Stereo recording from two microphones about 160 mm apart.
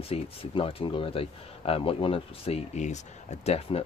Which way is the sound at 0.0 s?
35° left (ahead or behind).